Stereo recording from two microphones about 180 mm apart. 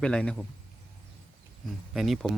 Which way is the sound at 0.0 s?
5° left (ahead or behind).